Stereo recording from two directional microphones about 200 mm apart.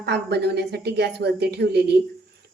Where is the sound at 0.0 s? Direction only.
55° right (ahead or behind).